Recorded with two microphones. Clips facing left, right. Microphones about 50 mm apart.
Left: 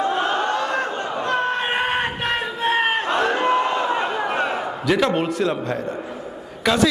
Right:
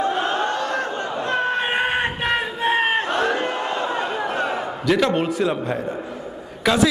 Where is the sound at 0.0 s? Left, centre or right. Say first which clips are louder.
Left 1 dB; left.